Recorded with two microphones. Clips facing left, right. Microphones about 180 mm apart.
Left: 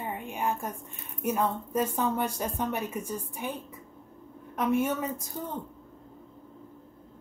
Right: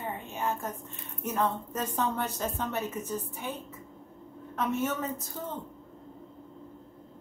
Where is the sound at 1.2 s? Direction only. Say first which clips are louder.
Left 2 dB; 10° left (ahead or behind).